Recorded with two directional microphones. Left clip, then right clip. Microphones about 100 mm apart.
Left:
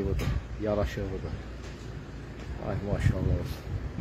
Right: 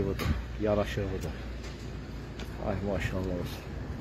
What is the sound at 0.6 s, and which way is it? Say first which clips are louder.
Speech: right 1 dB; 20° left (ahead or behind).